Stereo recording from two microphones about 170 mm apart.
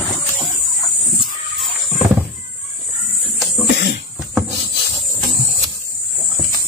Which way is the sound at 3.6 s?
90° left.